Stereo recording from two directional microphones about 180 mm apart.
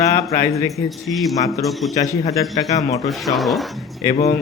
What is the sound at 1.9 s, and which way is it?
A man's voice, 20° left (ahead or behind).